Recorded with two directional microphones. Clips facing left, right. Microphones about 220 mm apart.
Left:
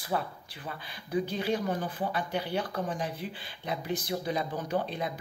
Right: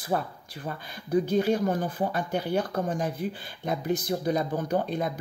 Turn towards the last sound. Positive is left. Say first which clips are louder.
# right 4 dB
turn(degrees=-45)  # may be behind; listen again after turning